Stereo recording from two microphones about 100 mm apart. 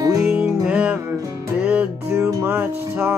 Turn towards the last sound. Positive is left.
turn(degrees=-20)  # may be behind; listen again after turning